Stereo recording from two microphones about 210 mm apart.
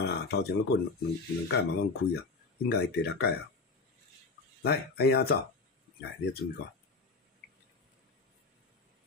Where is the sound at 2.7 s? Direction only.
50° left (ahead or behind).